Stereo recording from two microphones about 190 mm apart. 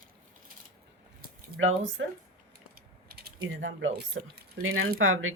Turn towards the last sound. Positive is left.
turn(degrees=-90)